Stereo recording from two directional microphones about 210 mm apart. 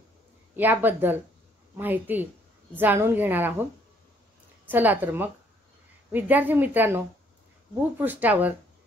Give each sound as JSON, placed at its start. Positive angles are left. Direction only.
{"t": 0.6, "sound": "a woman's voice", "side_deg": -10}
{"t": 4.6, "sound": "a woman's voice", "side_deg": -10}